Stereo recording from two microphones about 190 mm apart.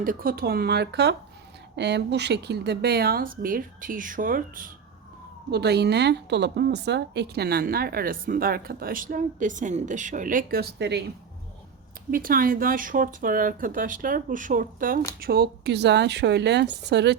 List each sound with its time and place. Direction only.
0.0 s a woman's voice: 50° right (ahead or behind)
5.5 s a woman's voice: 60° right (ahead or behind)
12.1 s a woman's voice: 50° right (ahead or behind); by 17.2 s 65° right (ahead or behind)